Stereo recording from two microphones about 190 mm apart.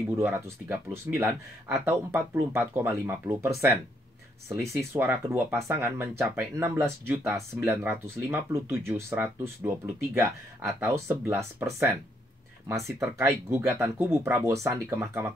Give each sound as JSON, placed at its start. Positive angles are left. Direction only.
{"t": 0.2, "sound": "speech", "side_deg": -10}